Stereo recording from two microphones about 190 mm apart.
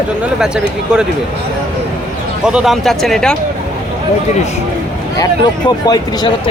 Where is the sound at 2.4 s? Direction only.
5° right (ahead or behind).